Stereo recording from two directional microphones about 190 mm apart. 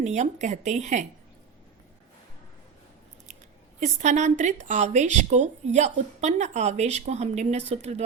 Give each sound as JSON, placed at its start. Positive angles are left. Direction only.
{"t": 0.0, "sound": "speech", "side_deg": -35}
{"t": 3.8, "sound": "speech", "side_deg": -40}